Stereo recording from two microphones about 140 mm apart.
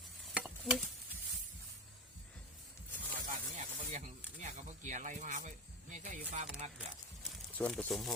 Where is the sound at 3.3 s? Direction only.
60° right (ahead or behind).